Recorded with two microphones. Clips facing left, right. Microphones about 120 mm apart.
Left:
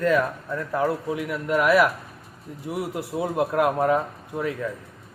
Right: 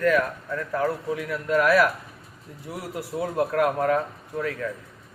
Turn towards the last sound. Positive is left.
turn(degrees=20)  # may be behind; listen again after turning